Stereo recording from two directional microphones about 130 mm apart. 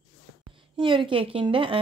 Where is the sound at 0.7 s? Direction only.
40° right (ahead or behind).